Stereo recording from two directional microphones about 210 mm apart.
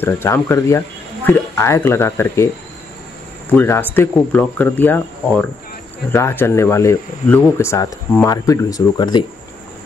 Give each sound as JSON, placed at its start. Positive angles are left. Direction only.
{"t": 0.0, "sound": "speech", "side_deg": 10}